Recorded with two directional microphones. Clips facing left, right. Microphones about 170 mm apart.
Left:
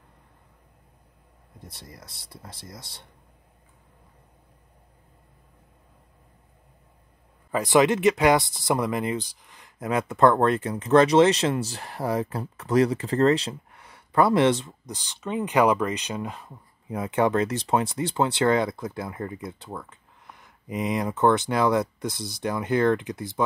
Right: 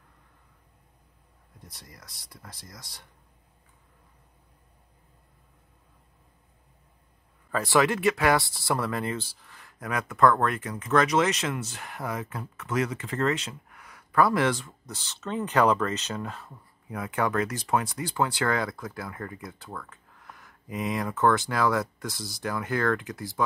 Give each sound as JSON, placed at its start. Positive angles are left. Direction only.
{"t": 1.7, "sound": "speech", "side_deg": 25}
{"t": 7.5, "sound": "speech", "side_deg": 20}